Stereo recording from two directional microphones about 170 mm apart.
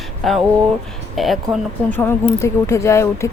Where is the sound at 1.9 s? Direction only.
10° left (ahead or behind).